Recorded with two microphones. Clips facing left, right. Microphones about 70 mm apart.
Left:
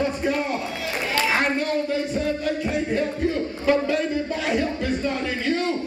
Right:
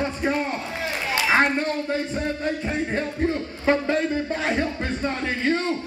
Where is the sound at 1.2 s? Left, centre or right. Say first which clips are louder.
Right 5 dB; right.